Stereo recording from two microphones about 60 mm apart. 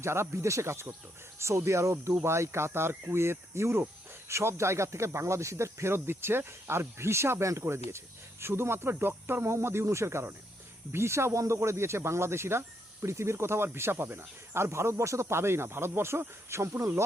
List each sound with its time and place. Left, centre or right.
0.0 s speech: right